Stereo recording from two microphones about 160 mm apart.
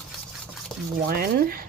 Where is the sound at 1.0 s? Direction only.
65° right (ahead or behind).